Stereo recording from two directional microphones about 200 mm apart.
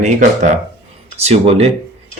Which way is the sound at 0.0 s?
35° right (ahead or behind).